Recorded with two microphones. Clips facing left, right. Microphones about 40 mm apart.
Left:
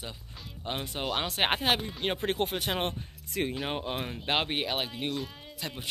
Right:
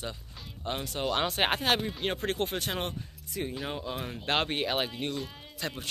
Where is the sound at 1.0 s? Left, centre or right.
Centre.